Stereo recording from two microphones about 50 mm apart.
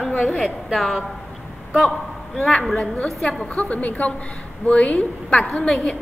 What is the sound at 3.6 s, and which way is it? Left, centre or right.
A woman's voice, left.